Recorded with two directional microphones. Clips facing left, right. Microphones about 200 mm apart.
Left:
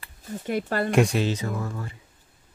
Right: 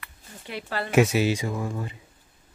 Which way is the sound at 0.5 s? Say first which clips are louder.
Left 6 dB; 50° left (ahead or behind).